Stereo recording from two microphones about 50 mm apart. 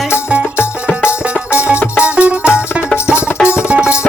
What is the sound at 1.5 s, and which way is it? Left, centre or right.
Music, right.